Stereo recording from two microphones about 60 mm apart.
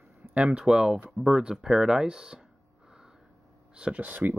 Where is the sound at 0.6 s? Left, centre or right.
Centre.